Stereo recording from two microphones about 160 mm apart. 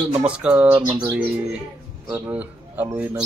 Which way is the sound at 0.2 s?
10° right (ahead or behind).